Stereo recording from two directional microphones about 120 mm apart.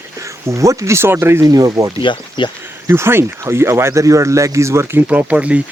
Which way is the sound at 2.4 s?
40° left (ahead or behind).